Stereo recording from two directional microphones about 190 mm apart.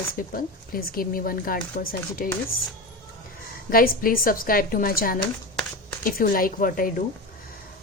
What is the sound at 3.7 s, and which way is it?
Speech, 50° left (ahead or behind).